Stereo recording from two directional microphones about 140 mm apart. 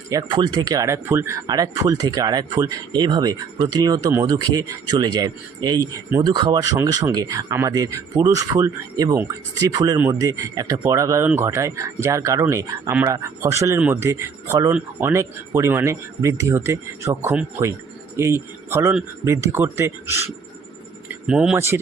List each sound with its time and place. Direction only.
0.1 s speech: 30° right (ahead or behind)
14.7 s speech: 10° right (ahead or behind)
15.1 s speech: 20° right (ahead or behind)
21.2 s speech: 5° right (ahead or behind)
21.5 s speech: 20° right (ahead or behind)